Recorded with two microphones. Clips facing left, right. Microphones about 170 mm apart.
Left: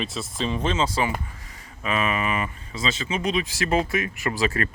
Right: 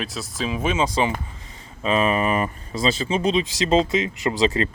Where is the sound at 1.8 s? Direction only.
30° right (ahead or behind).